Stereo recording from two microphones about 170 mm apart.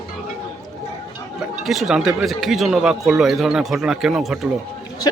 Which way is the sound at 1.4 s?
Centre (ahead or behind).